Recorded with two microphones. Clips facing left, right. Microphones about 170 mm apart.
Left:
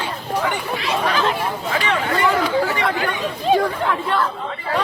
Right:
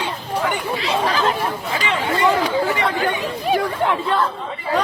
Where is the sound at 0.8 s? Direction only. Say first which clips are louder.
Even; 30° right (ahead or behind).